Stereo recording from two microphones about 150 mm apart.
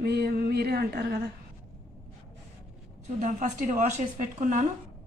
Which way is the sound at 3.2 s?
60° right (ahead or behind).